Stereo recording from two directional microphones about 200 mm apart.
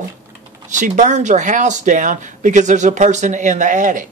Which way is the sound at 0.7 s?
40° right (ahead or behind).